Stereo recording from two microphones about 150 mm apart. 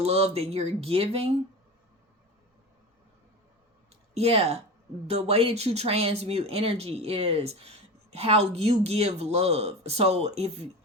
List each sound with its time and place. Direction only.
0.0 s speech: 45° right (ahead or behind)
4.1 s speech: 40° right (ahead or behind)